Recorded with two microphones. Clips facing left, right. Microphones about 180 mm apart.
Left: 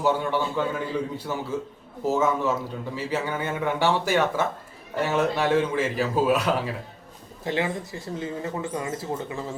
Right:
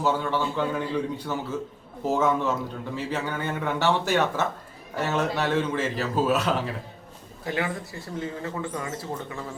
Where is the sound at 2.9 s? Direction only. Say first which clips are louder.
Left 2 dB; 10° left (ahead or behind).